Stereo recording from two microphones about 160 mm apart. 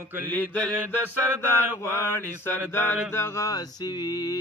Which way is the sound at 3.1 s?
15° left (ahead or behind).